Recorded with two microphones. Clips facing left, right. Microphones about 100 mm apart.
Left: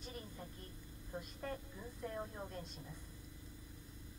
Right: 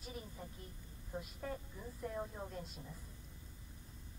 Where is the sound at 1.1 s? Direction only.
5° right (ahead or behind).